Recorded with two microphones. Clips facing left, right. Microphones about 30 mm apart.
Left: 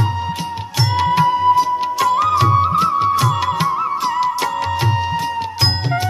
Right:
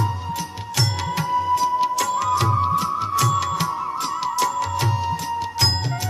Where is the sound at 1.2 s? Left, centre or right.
Left.